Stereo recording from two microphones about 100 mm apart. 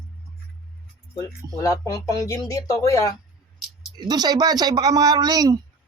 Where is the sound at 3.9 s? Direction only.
45° right (ahead or behind).